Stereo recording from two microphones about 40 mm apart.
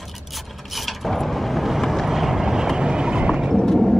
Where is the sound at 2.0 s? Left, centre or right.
Centre; by 3.5 s right.